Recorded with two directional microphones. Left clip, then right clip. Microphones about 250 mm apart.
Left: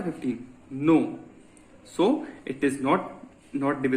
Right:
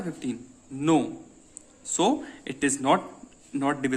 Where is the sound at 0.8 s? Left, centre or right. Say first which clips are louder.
Left 2 dB; right.